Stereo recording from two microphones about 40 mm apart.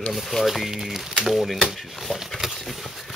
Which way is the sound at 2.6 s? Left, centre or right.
Centre.